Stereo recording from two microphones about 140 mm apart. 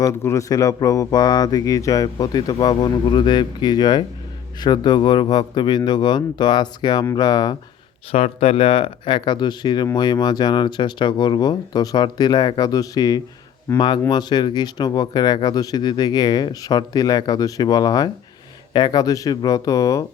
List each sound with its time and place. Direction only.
0.0 s speech: 20° left (ahead or behind)
8.1 s speech: 45° left (ahead or behind); by 20.1 s 25° left (ahead or behind)